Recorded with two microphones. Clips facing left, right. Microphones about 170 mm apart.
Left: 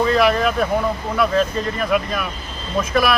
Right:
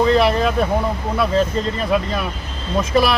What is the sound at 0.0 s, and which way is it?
Speech, 25° right (ahead or behind).